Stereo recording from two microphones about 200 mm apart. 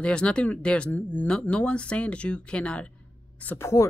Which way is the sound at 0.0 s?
5° left (ahead or behind).